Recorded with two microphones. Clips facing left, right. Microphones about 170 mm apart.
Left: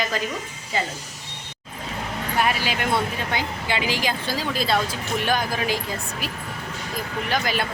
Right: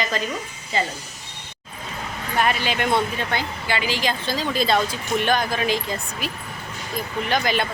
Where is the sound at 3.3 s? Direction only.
15° left (ahead or behind).